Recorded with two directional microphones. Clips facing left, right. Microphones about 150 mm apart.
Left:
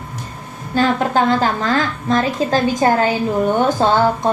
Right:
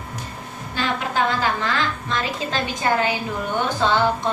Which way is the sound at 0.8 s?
45° left (ahead or behind).